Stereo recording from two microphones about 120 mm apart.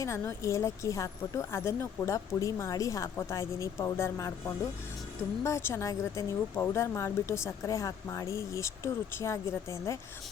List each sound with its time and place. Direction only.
0.0 s speech: 25° left (ahead or behind)